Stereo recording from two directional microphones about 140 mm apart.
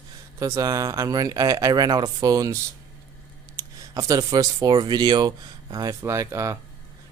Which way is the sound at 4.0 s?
25° right (ahead or behind).